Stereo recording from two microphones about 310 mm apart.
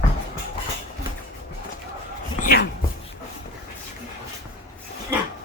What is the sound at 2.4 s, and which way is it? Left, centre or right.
Speech, left.